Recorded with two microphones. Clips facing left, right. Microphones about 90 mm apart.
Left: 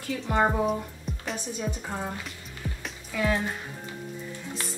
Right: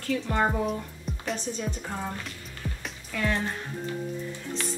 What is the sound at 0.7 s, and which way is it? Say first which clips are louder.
Speech: left 3 dB; centre (ahead or behind).